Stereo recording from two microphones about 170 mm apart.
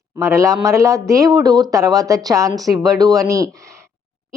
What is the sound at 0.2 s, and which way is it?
A man's voice, 15° right (ahead or behind).